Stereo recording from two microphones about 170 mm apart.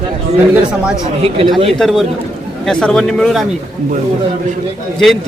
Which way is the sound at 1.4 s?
30° right (ahead or behind).